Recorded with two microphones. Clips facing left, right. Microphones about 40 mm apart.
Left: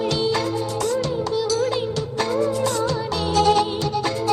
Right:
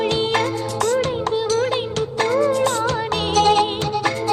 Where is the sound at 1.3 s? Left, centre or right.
Right.